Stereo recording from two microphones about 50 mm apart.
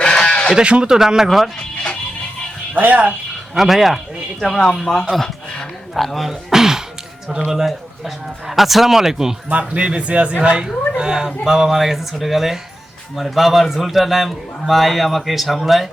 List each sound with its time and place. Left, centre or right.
0.0 s sheep: centre
0.5 s a man's voice: right
2.7 s speech: right
3.5 s a man's voice: centre
5.9 s a sound: centre
7.3 s a man's voice: centre
9.5 s a man's voice: right; by 15.9 s centre